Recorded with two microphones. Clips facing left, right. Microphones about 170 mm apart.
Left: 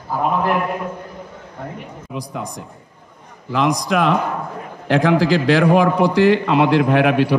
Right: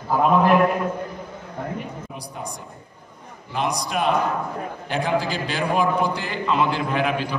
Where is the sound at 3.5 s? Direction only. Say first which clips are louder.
Left 7 dB; 90° left.